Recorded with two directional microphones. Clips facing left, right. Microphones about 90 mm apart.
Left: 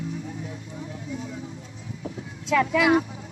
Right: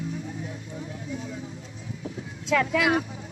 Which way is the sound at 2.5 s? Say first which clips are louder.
Left 3 dB; 25° left (ahead or behind).